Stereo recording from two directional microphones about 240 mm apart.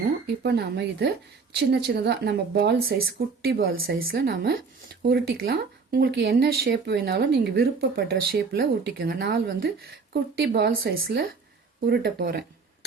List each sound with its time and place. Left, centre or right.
0.4 s speech: right